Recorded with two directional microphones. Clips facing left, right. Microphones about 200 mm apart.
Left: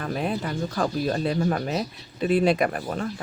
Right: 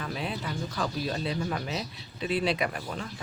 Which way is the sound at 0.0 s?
50° left (ahead or behind).